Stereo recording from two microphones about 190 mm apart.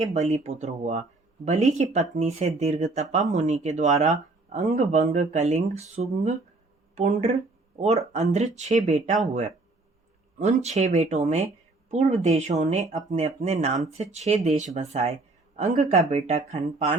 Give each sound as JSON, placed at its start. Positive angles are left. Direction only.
{"t": 0.0, "sound": "speech", "side_deg": -35}